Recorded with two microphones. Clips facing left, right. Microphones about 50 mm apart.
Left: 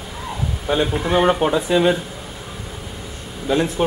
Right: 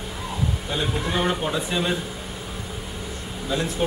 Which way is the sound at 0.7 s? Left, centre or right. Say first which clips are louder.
Left 9 dB; left.